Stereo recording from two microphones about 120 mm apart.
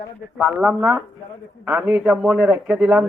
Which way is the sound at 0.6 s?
10° right (ahead or behind).